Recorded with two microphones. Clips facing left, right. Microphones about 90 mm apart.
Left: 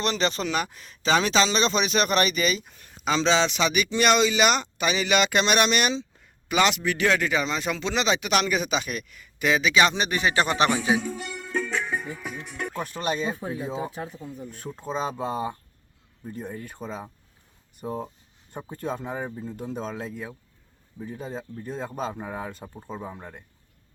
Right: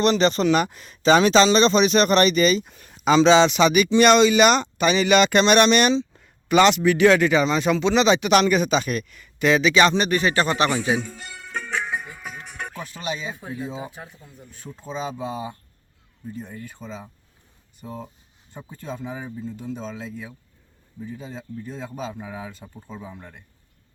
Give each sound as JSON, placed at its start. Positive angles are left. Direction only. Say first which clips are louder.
{"t": 0.0, "sound": "speech", "louder": "right 7 dB", "side_deg": 0}
{"t": 2.7, "sound": "speech", "louder": "right 8 dB", "side_deg": -5}
{"t": 12.8, "sound": "speech", "louder": "left 3 dB", "side_deg": 45}
{"t": 14.8, "sound": "speech", "louder": "left 1 dB", "side_deg": 45}